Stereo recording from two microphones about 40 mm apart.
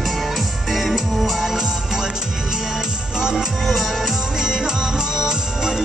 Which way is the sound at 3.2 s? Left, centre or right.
Centre.